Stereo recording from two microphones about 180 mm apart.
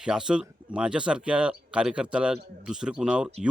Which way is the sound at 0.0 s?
5° right (ahead or behind).